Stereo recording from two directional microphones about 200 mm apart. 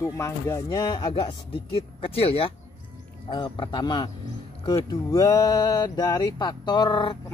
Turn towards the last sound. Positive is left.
turn(degrees=25)  # may be behind; listen again after turning